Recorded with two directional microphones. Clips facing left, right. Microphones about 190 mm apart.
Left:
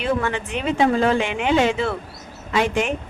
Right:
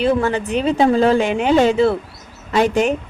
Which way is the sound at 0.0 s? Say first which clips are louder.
Right 6 dB; 35° right (ahead or behind).